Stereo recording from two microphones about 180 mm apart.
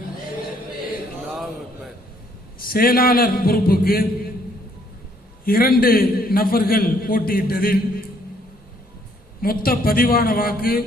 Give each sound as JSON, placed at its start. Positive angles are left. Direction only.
{"t": 2.6, "sound": "a man's voice", "side_deg": 55}
{"t": 5.5, "sound": "a man's voice", "side_deg": 55}
{"t": 9.4, "sound": "a man's voice", "side_deg": 55}